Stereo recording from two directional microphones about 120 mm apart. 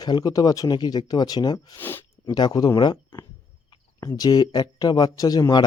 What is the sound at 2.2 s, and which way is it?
Speech, 35° left (ahead or behind).